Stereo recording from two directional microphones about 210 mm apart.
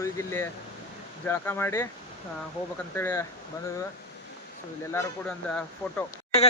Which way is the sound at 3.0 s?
10° left (ahead or behind).